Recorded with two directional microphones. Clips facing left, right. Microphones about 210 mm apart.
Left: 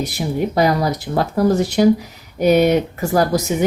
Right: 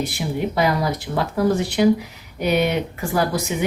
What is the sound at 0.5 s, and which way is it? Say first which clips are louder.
Speech: left 4 dB; 40° left (ahead or behind).